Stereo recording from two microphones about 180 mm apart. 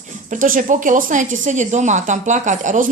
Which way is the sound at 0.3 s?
45° right (ahead or behind).